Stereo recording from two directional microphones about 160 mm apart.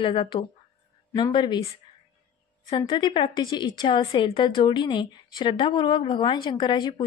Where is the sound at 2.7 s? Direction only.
30° left (ahead or behind).